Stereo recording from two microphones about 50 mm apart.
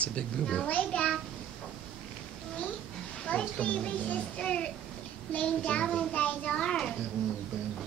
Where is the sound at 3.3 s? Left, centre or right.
Left.